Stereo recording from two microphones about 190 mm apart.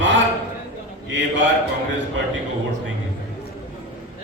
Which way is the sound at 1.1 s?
75° right (ahead or behind).